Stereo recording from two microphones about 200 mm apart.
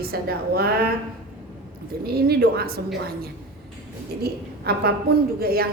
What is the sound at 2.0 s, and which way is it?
Speech, 50° right (ahead or behind).